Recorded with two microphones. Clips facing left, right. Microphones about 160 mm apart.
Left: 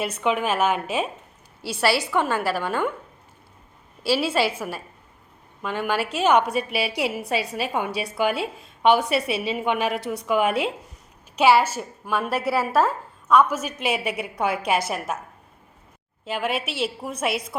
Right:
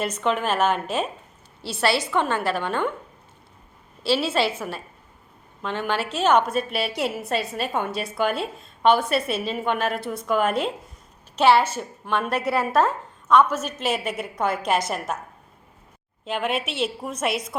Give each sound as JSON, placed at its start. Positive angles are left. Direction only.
{"t": 0.0, "sound": "a woman's voice", "side_deg": 10}
{"t": 4.0, "sound": "a woman's voice", "side_deg": 10}
{"t": 16.2, "sound": "a woman's voice", "side_deg": 5}